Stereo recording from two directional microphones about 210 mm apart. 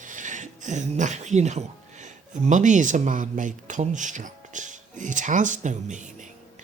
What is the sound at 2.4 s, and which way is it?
A man's voice, 35° right (ahead or behind).